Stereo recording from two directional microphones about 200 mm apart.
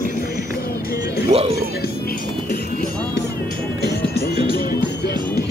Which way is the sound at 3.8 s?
50° left (ahead or behind).